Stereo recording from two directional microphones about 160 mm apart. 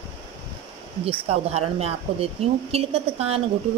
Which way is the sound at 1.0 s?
40° right (ahead or behind).